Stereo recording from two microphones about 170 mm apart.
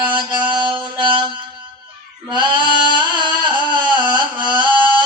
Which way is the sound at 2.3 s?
30° right (ahead or behind).